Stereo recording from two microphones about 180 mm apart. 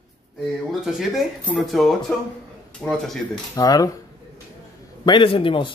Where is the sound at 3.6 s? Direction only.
20° left (ahead or behind).